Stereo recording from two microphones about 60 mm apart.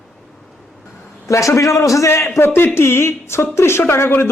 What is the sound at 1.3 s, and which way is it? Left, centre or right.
A man's voice, left.